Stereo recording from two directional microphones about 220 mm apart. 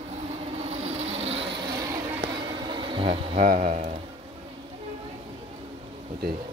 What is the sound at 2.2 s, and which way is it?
Bee, 15° right (ahead or behind).